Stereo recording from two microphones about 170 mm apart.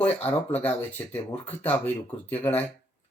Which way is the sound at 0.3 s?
10° left (ahead or behind).